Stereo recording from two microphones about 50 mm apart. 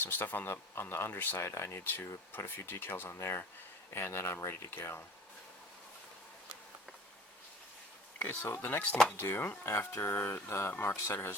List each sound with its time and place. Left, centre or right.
0.0 s speech: left
4.2 s speech: left
8.4 s speech: left
9.6 s speech: left
10.0 s speech: left
10.7 s speech: left
10.9 s speech: left